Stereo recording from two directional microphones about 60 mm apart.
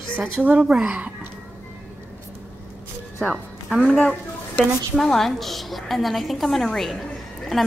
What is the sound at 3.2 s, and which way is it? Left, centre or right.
A woman's voice, centre.